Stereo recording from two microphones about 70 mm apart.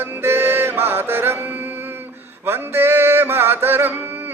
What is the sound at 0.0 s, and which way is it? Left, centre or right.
Music, right.